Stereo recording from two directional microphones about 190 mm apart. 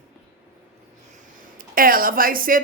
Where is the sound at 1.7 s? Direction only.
50° right (ahead or behind).